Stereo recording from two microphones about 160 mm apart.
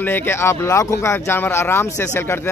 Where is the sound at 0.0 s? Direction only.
15° left (ahead or behind).